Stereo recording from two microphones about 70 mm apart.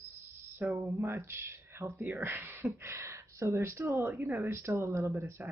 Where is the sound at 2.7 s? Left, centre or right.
Right.